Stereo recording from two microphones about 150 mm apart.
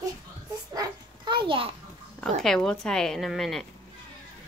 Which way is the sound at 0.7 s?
30° right (ahead or behind).